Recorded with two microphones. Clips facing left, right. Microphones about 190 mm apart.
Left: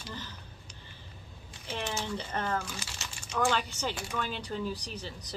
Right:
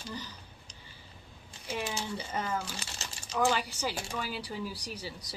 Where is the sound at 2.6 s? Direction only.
35° right (ahead or behind).